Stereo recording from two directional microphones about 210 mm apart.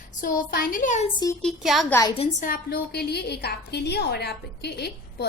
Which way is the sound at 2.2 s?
35° left (ahead or behind).